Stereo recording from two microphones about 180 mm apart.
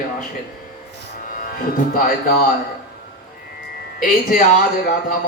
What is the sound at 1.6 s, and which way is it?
Speech, 55° left (ahead or behind).